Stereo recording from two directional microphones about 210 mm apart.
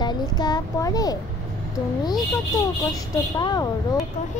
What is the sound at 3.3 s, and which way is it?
Speech, 20° left (ahead or behind).